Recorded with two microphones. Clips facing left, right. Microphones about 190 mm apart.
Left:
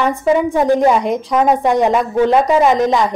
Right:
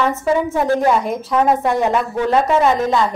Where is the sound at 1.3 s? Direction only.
15° left (ahead or behind).